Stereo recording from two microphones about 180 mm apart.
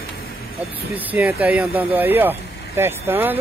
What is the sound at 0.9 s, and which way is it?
Speech, 10° right (ahead or behind).